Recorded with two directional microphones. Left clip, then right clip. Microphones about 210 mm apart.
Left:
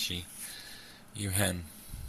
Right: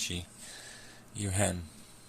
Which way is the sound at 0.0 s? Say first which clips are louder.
Left 2 dB; 10° right (ahead or behind).